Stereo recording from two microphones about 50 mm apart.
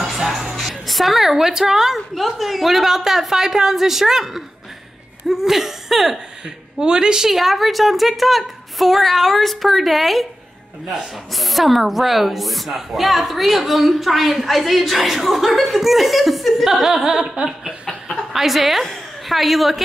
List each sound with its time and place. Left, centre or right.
0.0 s music: centre
0.6 s a woman's voice: centre
5.3 s laughter: centre
6.8 s laughter: centre
7.2 s a woman's voice: centre
11.3 s a woman's voice: centre
17.1 s laughter: centre
18.1 s a woman's voice: centre